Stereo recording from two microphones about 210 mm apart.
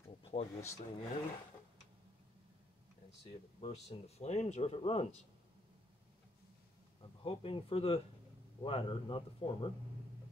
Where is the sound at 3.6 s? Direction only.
30° left (ahead or behind).